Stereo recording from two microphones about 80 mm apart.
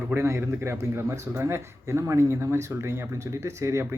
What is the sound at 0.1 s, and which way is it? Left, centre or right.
Speech, right.